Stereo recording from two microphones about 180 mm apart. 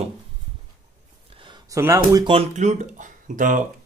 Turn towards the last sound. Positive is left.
turn(degrees=-45)  # may be behind; listen again after turning